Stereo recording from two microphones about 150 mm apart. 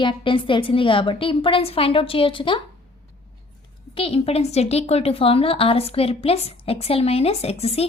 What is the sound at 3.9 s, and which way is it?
A woman's voice, 40° left (ahead or behind).